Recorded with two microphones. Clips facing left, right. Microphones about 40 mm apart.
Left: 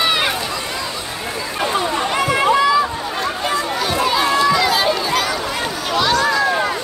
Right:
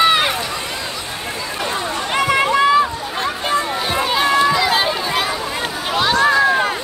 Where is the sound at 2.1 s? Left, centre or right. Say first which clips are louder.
Right 1 dB; right.